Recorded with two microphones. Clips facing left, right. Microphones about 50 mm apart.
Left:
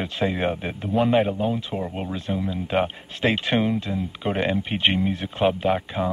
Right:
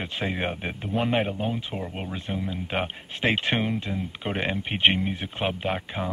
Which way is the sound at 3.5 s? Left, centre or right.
Centre.